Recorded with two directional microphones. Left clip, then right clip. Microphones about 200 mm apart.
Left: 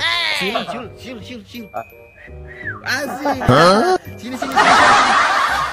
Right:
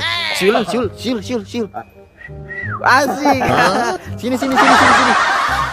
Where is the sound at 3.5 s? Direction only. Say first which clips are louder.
Left 2 dB; centre (ahead or behind).